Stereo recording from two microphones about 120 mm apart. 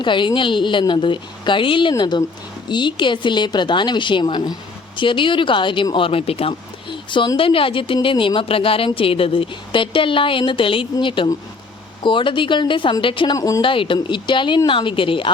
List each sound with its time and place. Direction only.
0.0 s a woman's voice: 40° left (ahead or behind)
7.1 s speech: 45° left (ahead or behind)
13.3 s speech: 30° left (ahead or behind)
13.6 s speech: 45° left (ahead or behind)